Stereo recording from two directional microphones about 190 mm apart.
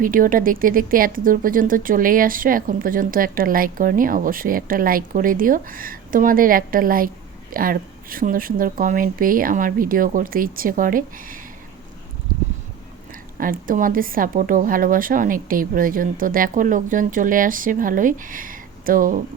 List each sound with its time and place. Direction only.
0.0 s speech: 45° right (ahead or behind)
13.4 s speech: 45° right (ahead or behind)